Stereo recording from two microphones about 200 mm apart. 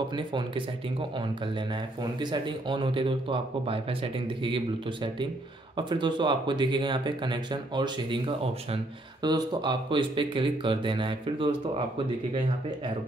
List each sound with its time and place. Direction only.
0.1 s speech: 25° right (ahead or behind)